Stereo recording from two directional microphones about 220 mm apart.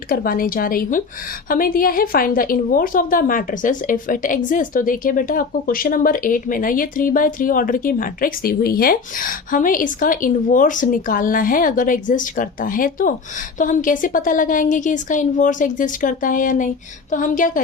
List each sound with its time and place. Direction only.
0.1 s a woman's voice: 40° left (ahead or behind)